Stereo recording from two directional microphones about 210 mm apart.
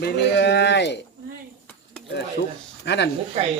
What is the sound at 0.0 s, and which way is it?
Speech, 55° left (ahead or behind).